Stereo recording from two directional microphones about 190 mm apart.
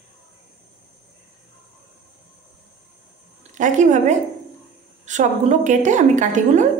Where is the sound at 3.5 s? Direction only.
40° right (ahead or behind).